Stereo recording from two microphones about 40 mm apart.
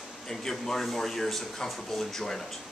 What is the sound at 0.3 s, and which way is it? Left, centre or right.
Speech, centre.